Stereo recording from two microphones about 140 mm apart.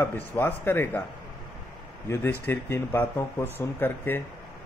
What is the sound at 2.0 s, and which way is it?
A man's voice, 15° left (ahead or behind).